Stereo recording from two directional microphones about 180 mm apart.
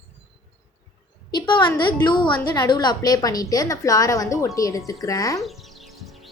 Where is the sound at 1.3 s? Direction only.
25° left (ahead or behind).